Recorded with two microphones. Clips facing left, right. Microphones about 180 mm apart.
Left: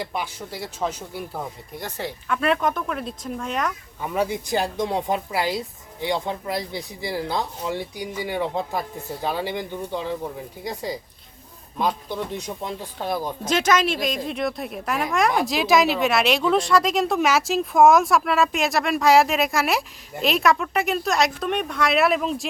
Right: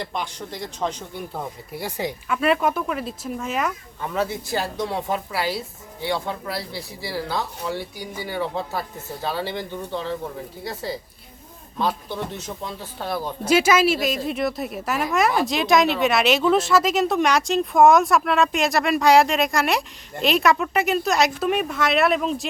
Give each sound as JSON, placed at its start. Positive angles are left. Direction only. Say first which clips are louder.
{"t": 0.0, "sound": "speech", "louder": "even", "side_deg": 5}
{"t": 4.0, "sound": "a woman's voice", "louder": "left 1 dB", "side_deg": 15}
{"t": 13.4, "sound": "speech", "louder": "right 4 dB", "side_deg": -10}